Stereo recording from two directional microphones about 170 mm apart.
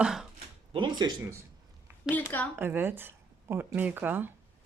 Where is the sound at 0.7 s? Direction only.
25° right (ahead or behind).